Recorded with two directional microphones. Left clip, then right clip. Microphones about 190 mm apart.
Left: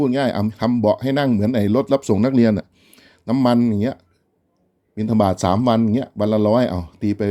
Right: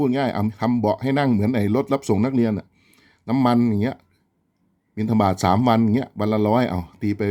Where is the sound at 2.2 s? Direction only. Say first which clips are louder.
Left 5 dB; 20° left (ahead or behind).